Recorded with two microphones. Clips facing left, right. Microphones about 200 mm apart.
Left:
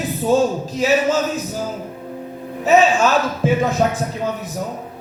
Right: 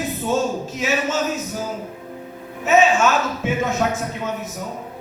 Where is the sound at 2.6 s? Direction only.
35° left (ahead or behind).